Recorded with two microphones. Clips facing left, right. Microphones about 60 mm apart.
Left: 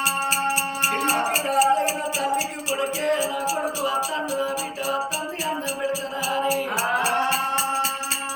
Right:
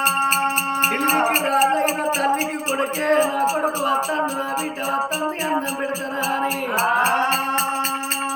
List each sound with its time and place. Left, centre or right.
0.0 s music: right
6.3 s music: right